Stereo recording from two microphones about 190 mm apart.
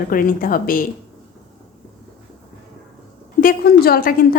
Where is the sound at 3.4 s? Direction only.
50° left (ahead or behind).